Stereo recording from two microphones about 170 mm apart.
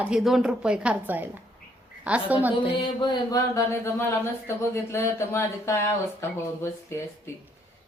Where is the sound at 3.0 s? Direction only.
25° left (ahead or behind).